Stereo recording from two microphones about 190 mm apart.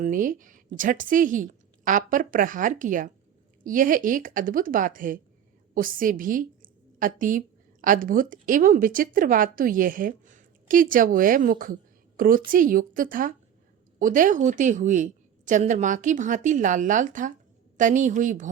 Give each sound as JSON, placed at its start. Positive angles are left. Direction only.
{"t": 0.0, "sound": "a woman's voice", "side_deg": -45}